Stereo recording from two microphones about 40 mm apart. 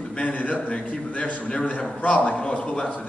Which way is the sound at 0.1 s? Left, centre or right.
Left.